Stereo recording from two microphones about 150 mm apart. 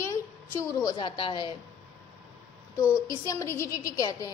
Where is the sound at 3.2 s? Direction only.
20° left (ahead or behind).